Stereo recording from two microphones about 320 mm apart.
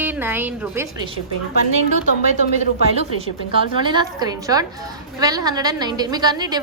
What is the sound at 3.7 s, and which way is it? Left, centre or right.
A woman's voice, centre.